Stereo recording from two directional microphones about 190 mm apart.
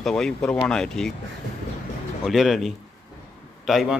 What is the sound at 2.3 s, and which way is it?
Speech, centre (ahead or behind).